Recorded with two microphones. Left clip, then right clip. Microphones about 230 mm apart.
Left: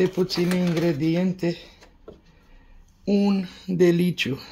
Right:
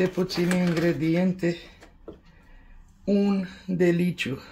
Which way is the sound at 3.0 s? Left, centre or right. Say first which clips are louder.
Left 1 dB; left.